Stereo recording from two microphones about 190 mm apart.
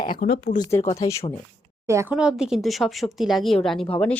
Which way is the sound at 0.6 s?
15° left (ahead or behind).